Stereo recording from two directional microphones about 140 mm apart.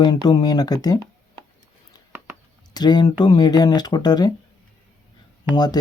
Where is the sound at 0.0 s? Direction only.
30° left (ahead or behind).